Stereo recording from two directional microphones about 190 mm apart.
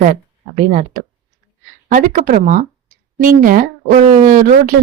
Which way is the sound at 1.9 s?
45° right (ahead or behind).